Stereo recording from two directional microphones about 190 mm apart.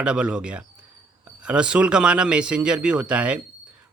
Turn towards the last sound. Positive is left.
turn(degrees=-5)  # may be behind; listen again after turning